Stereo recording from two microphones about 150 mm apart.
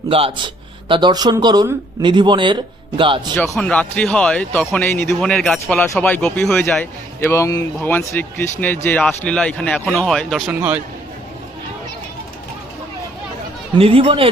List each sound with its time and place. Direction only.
0.1 s speech: 40° right (ahead or behind)
3.5 s a man's voice: 10° left (ahead or behind)
5.2 s a man's voice: 5° left (ahead or behind)
10.5 s a man's voice: 10° right (ahead or behind)
13.7 s speech: 40° right (ahead or behind)